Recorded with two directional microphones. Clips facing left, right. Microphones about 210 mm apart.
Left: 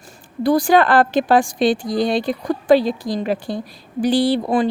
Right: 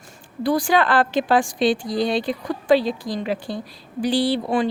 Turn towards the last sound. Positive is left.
turn(degrees=45)  # may be behind; listen again after turning